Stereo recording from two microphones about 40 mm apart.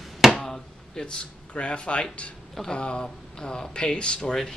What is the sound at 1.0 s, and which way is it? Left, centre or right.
Speech, left.